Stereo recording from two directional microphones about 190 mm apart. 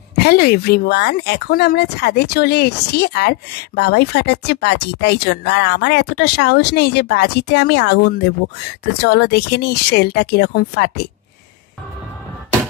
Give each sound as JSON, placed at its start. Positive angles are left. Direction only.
{"t": 0.2, "sound": "speech", "side_deg": 55}